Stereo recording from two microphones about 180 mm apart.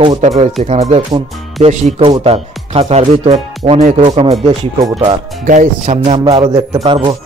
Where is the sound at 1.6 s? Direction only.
35° right (ahead or behind).